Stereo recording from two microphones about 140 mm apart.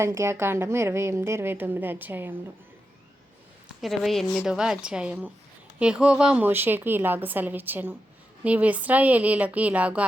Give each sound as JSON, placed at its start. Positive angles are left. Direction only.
{"t": 0.0, "sound": "a woman's voice", "side_deg": -20}
{"t": 3.8, "sound": "a woman's voice", "side_deg": 0}